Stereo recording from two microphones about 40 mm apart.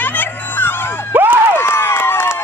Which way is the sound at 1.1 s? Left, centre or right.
Right.